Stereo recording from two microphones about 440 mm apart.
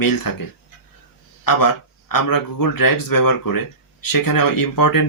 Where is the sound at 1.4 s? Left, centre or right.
Left.